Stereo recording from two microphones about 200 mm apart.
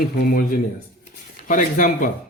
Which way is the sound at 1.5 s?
40° left (ahead or behind).